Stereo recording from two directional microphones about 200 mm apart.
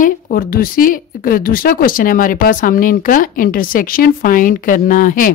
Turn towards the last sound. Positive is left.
turn(degrees=45)  # may be behind; listen again after turning